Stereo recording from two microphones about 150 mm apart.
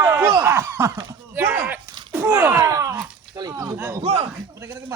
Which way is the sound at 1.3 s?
15° right (ahead or behind).